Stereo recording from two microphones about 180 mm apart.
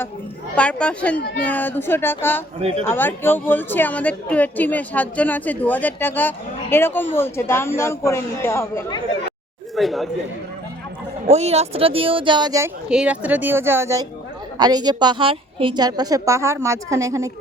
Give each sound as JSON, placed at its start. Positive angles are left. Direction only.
{"t": 0.5, "sound": "speech", "side_deg": 5}
{"t": 1.2, "sound": "speech", "side_deg": 60}
{"t": 1.5, "sound": "speech", "side_deg": 10}
{"t": 2.6, "sound": "speech", "side_deg": -30}
{"t": 2.8, "sound": "speech", "side_deg": 10}
{"t": 9.7, "sound": "speech", "side_deg": 0}
{"t": 11.3, "sound": "speech", "side_deg": -35}
{"t": 12.9, "sound": "a woman's voice", "side_deg": -5}